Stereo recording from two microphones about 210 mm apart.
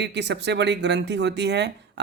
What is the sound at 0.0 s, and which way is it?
Speech, 55° right (ahead or behind).